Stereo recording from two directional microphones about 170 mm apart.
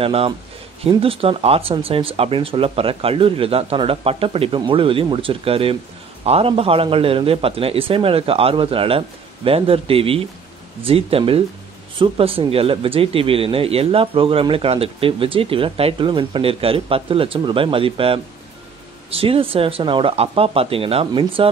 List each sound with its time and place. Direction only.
0.0 s speech: 35° right (ahead or behind)